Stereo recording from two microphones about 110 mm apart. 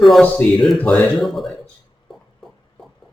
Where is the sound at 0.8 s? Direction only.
10° left (ahead or behind).